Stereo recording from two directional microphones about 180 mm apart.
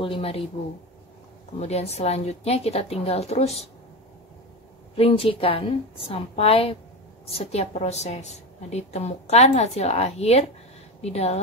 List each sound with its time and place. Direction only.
0.0 s a woman's voice: 30° left (ahead or behind)
1.6 s a woman's voice: 35° left (ahead or behind)
4.9 s a woman's voice: 30° left (ahead or behind)